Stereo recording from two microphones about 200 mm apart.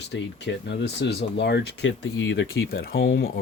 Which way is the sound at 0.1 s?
60° left (ahead or behind).